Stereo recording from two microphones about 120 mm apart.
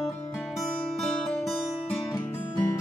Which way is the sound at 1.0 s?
5° left (ahead or behind).